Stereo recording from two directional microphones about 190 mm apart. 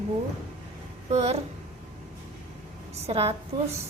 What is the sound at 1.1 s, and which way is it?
Speech, 35° right (ahead or behind).